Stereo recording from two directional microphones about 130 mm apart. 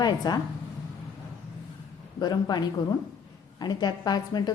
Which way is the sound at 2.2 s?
30° left (ahead or behind).